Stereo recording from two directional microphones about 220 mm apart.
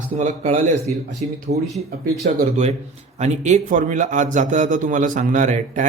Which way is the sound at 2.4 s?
35° right (ahead or behind).